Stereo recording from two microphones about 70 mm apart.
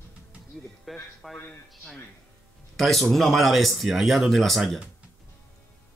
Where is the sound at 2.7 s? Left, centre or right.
Centre.